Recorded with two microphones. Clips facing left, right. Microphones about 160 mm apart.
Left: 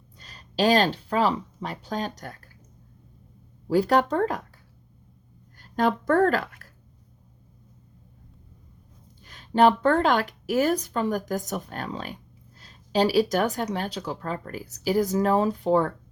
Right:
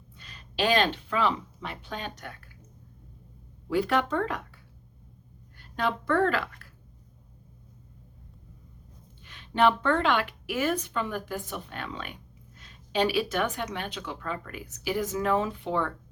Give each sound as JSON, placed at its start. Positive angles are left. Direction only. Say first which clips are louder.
{"t": 0.2, "sound": "speech", "louder": "left 5 dB", "side_deg": 35}
{"t": 3.7, "sound": "speech", "louder": "left 5 dB", "side_deg": 40}
{"t": 5.5, "sound": "a woman's voice", "louder": "left 6 dB", "side_deg": 40}
{"t": 9.2, "sound": "speech", "louder": "left 4 dB", "side_deg": 40}